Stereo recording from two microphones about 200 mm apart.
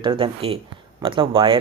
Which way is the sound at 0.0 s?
25° right (ahead or behind).